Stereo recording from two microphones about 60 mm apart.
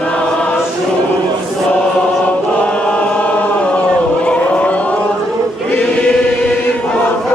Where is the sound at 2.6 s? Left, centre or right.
Centre.